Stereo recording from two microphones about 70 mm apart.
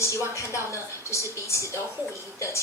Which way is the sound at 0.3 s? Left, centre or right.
Left.